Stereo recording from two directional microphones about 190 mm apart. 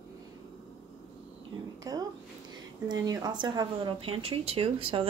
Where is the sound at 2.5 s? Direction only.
20° right (ahead or behind).